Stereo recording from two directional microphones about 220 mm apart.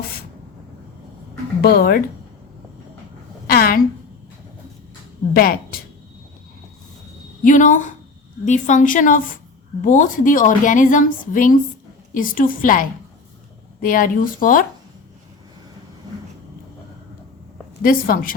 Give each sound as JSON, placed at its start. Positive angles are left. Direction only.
{"t": 1.6, "sound": "a woman's voice", "side_deg": 40}
{"t": 3.4, "sound": "a sound", "side_deg": 45}
{"t": 5.3, "sound": "a woman's voice", "side_deg": 45}
{"t": 7.4, "sound": "a woman's voice", "side_deg": 35}
{"t": 13.8, "sound": "a woman's voice", "side_deg": 40}
{"t": 17.8, "sound": "a woman's voice", "side_deg": 40}